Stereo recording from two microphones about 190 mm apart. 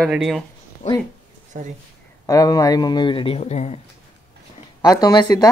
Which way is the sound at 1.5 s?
40° right (ahead or behind).